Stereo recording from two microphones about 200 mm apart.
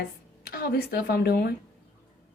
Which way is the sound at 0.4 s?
50° left (ahead or behind).